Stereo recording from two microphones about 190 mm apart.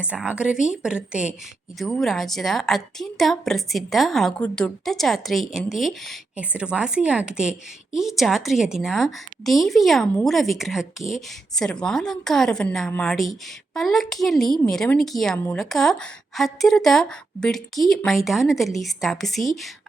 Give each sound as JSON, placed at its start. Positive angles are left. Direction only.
{"t": 0.0, "sound": "a woman's voice", "side_deg": -5}